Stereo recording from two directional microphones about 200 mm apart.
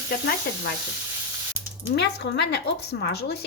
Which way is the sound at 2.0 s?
55° left (ahead or behind).